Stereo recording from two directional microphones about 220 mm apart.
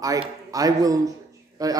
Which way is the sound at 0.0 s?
15° right (ahead or behind).